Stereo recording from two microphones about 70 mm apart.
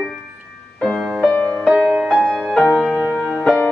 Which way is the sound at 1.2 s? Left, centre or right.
Centre.